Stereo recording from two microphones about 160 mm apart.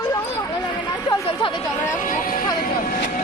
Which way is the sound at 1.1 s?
30° left (ahead or behind).